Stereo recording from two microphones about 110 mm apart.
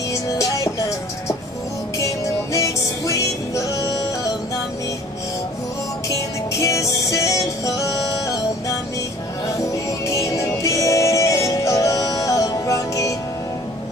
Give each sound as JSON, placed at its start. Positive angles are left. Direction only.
{"t": 0.4, "sound": "music", "side_deg": 30}
{"t": 6.6, "sound": "music", "side_deg": 30}
{"t": 10.0, "sound": "music", "side_deg": 30}